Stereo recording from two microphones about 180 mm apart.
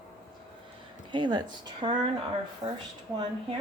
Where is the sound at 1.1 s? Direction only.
25° right (ahead or behind).